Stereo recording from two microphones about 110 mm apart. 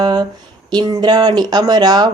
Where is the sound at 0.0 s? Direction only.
40° right (ahead or behind).